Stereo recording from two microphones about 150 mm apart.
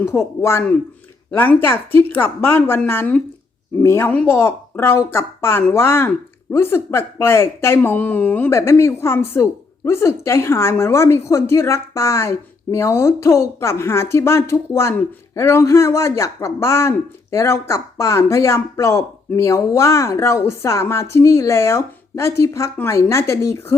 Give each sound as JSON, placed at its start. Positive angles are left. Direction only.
{"t": 0.0, "sound": "speech", "side_deg": 20}